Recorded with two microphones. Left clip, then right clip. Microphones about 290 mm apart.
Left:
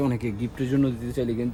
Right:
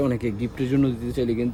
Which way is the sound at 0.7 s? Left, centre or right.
Centre.